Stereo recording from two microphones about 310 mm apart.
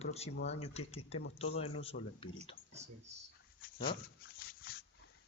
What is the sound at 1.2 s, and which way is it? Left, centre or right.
Speech, left.